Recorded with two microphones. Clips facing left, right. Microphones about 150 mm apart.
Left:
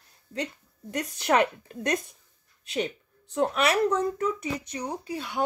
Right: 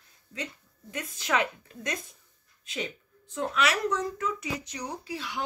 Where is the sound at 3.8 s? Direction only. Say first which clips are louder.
Left 4 dB; 30° left (ahead or behind).